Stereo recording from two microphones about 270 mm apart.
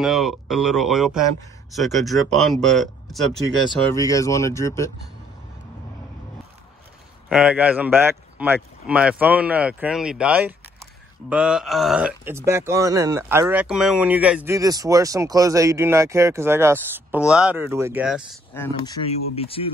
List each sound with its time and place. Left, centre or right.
0.0 s speech: centre
3.8 s speech: centre
7.2 s speech: centre
18.5 s speech: centre
19.0 s speech: left